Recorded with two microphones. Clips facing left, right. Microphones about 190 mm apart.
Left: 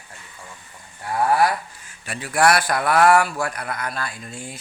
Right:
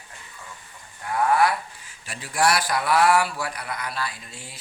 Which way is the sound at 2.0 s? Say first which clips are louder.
Left 4 dB; 60° left (ahead or behind).